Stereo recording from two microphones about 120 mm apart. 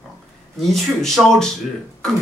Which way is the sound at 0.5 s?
Centre (ahead or behind).